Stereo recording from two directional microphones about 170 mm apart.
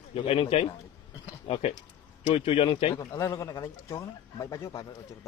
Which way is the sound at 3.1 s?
15° left (ahead or behind).